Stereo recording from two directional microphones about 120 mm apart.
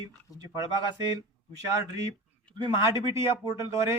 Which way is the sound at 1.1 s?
30° right (ahead or behind).